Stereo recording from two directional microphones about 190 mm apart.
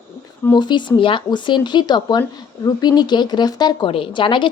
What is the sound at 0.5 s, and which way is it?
Speech, 25° left (ahead or behind).